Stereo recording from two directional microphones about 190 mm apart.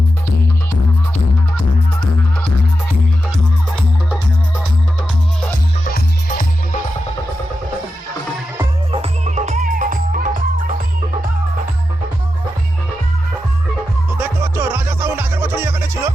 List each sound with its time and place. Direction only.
5.8 s music: 45° left (ahead or behind)
8.9 s music: 35° right (ahead or behind)
14.1 s music: 10° right (ahead or behind)